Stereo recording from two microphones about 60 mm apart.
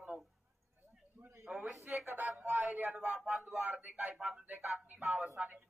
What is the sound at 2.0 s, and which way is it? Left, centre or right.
Speech, right.